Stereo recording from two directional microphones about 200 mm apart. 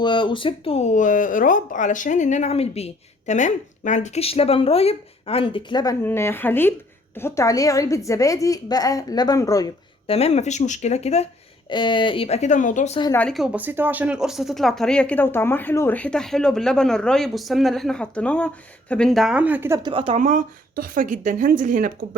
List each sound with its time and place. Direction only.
0.0 s a woman's voice: 25° left (ahead or behind)
10.1 s speech: 30° left (ahead or behind)
13.1 s speech: centre (ahead or behind); by 19.9 s 15° right (ahead or behind)
19.9 s a woman's voice: 25° right (ahead or behind); by 21.9 s 40° right (ahead or behind)